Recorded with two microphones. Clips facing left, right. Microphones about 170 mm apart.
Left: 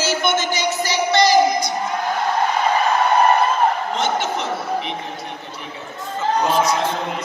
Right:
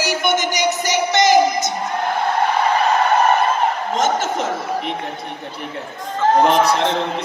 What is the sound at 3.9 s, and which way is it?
Speech, 45° right (ahead or behind).